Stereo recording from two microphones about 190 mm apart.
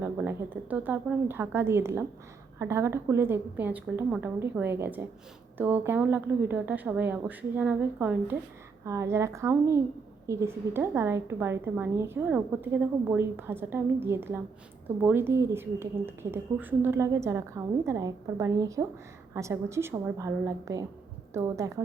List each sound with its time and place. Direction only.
0.0 s a woman's voice: 10° right (ahead or behind)